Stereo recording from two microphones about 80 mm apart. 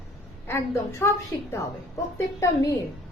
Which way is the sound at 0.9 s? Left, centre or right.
Left.